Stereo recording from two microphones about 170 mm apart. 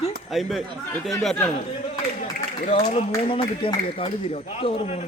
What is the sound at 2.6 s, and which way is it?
A man's voice, 40° left (ahead or behind).